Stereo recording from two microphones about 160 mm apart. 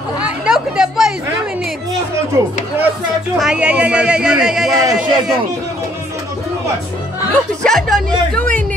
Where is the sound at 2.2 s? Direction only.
15° right (ahead or behind).